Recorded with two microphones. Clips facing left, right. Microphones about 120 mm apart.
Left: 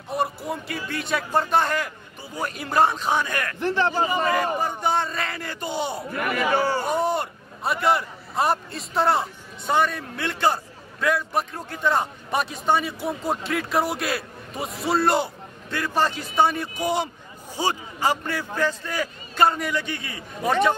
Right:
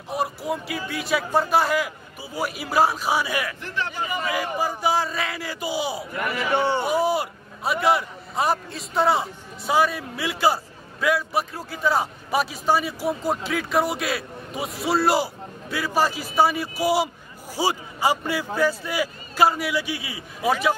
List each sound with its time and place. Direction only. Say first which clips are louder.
0.1 s a man's voice: even; centre (ahead or behind)
3.6 s a man's voice: left 7 dB; 35° left (ahead or behind)
4.6 s a man's voice: right 1 dB; 5° right (ahead or behind)
6.1 s a man's voice: left 1 dB; 20° right (ahead or behind)
6.8 s a man's voice: right 1 dB; 5° right (ahead or behind)